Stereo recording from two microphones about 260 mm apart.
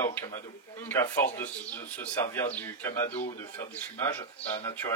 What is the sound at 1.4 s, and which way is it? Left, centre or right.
A man's voice, centre.